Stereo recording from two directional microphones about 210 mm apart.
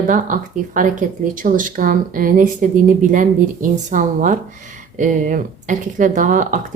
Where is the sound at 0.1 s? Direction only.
40° right (ahead or behind).